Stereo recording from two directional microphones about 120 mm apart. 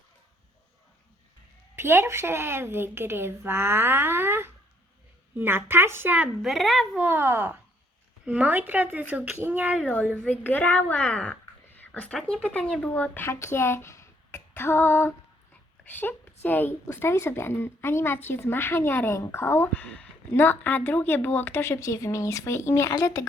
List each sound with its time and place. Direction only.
1.7 s a woman's voice: 20° right (ahead or behind); by 7.0 s centre (ahead or behind)
7.0 s a woman's voice: 15° right (ahead or behind)
9.8 s a woman's voice: 10° left (ahead or behind); by 23.2 s 25° left (ahead or behind)